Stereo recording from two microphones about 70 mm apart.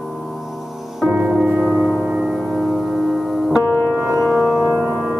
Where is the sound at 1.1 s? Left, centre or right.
Right.